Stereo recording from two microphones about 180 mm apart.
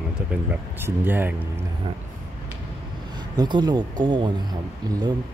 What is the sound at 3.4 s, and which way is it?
Speech, 25° right (ahead or behind).